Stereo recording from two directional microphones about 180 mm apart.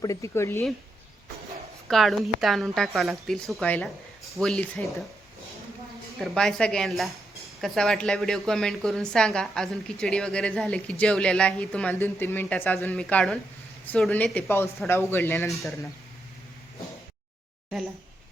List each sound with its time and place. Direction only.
0.0 s speech: 20° left (ahead or behind)
1.9 s a woman's voice: centre (ahead or behind)
6.1 s a woman's voice: centre (ahead or behind)
15.4 s a woman's voice: centre (ahead or behind)